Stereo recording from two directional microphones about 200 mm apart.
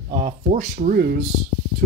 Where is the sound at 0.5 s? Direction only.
45° right (ahead or behind).